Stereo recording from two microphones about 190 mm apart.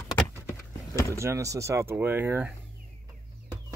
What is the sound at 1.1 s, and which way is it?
Speech, 15° right (ahead or behind).